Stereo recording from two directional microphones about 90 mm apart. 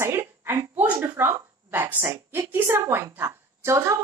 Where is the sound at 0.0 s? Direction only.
30° right (ahead or behind).